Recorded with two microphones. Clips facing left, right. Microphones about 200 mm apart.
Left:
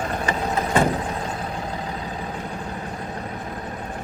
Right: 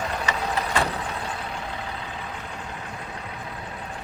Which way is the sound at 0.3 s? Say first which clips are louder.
Left 5 dB; 50° left (ahead or behind).